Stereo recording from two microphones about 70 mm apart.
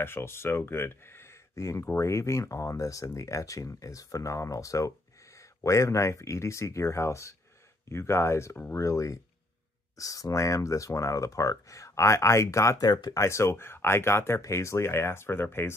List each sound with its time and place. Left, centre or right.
0.0 s speech: left
12.8 s speech: left
13.1 s speech: left